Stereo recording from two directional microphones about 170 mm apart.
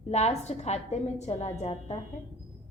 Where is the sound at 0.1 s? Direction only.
40° left (ahead or behind).